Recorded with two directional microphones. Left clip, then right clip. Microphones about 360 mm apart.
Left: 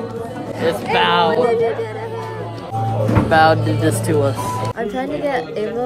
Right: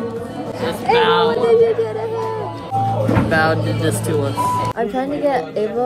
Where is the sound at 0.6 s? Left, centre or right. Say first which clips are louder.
Right 1 dB; centre.